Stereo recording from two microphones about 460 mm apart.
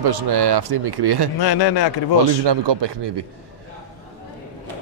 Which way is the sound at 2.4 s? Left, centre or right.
Right.